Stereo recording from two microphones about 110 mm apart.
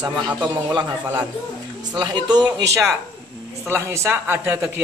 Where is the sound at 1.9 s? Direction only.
40° right (ahead or behind).